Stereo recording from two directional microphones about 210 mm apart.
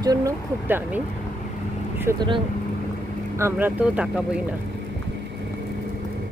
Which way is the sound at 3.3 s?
10° right (ahead or behind).